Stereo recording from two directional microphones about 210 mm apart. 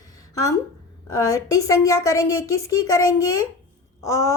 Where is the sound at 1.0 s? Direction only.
15° left (ahead or behind).